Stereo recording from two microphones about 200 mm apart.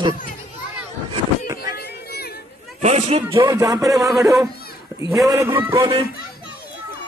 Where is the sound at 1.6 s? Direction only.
50° left (ahead or behind).